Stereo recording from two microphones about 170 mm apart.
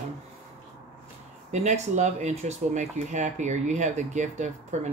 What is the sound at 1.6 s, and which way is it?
Speech, 45° right (ahead or behind).